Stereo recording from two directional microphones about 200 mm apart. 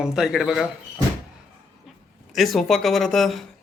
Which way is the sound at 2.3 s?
Centre (ahead or behind).